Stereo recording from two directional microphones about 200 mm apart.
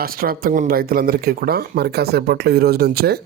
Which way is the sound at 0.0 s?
45° right (ahead or behind).